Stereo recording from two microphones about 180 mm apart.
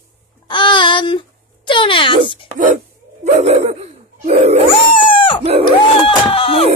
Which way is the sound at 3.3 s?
40° right (ahead or behind).